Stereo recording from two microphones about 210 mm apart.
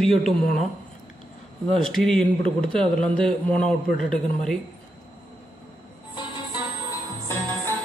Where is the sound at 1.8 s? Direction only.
Centre (ahead or behind).